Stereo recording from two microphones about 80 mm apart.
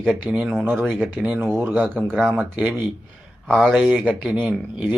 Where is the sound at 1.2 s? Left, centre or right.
Centre.